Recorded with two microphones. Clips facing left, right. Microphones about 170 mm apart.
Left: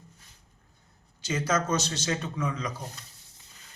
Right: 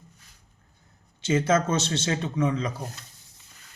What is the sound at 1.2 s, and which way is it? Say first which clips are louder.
Speech: right 6 dB; 25° right (ahead or behind).